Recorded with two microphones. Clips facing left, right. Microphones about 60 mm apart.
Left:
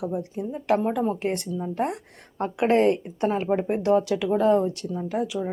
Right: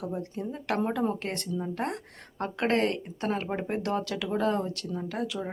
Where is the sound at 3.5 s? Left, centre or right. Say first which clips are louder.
Left 8 dB; centre.